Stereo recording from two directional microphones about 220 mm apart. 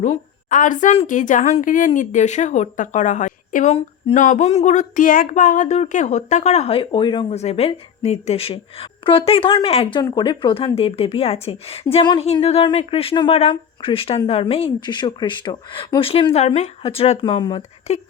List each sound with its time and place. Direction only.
0.0 s a woman's voice: 35° left (ahead or behind)